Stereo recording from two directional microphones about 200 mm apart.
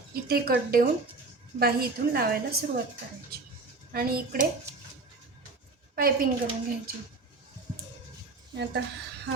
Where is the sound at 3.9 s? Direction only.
45° right (ahead or behind).